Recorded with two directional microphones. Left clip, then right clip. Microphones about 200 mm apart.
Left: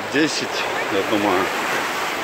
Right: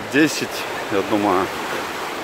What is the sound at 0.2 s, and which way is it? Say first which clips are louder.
Speech: right 3 dB; 35° right (ahead or behind).